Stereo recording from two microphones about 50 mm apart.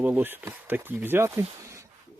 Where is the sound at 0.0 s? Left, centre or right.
Right.